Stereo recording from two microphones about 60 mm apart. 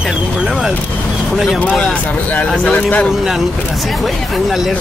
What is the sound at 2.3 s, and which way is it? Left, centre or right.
Speech, left.